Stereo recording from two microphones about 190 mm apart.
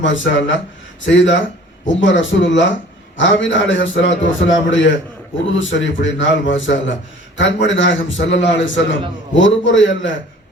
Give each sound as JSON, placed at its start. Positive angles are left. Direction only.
{"t": 0.0, "sound": "a man's voice", "side_deg": 80}